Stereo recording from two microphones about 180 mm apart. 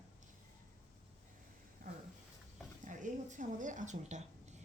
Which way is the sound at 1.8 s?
55° right (ahead or behind).